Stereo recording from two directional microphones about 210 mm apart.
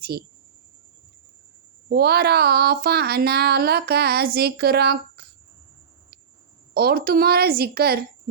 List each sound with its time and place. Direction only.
0.0 s speech: 50° right (ahead or behind)
1.9 s speech: 50° right (ahead or behind)
6.7 s speech: 45° right (ahead or behind)